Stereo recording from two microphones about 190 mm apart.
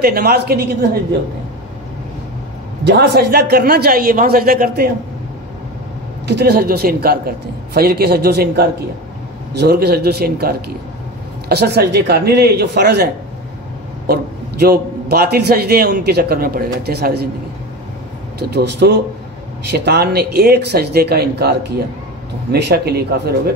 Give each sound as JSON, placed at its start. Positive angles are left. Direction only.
{"t": 0.0, "sound": "a man's voice", "side_deg": -55}
{"t": 2.8, "sound": "speech", "side_deg": -60}
{"t": 6.2, "sound": "a man's voice", "side_deg": -60}
{"t": 18.5, "sound": "a man's voice", "side_deg": -60}